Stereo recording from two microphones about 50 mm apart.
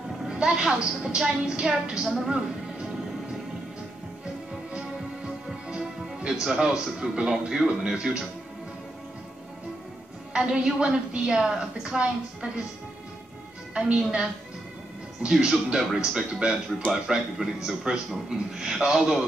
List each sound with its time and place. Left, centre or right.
0.3 s a woman's voice: centre
5.7 s music: centre
6.4 s a woman's voice: centre
10.3 s a woman's voice: centre
13.8 s a woman's voice: centre